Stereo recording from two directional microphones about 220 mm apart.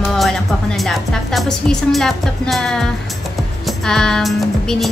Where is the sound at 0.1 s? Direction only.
Centre (ahead or behind).